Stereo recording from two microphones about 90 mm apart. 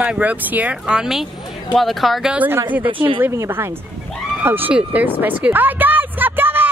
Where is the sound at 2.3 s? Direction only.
20° right (ahead or behind).